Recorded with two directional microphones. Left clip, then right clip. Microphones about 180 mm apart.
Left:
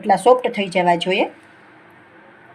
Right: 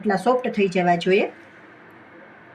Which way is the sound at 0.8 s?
45° left (ahead or behind).